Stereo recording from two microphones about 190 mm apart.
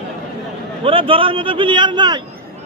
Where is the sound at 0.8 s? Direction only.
30° right (ahead or behind).